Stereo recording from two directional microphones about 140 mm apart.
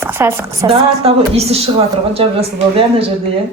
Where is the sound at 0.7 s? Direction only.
45° right (ahead or behind).